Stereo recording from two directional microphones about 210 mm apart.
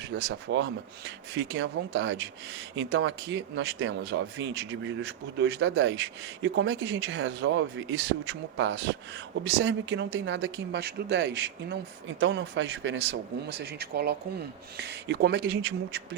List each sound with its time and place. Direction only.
0.0 s speech: 55° right (ahead or behind)